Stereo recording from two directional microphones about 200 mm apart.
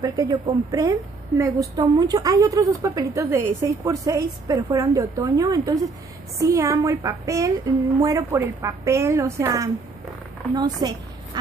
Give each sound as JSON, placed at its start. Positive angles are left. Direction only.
{"t": 0.0, "sound": "a woman's voice", "side_deg": -20}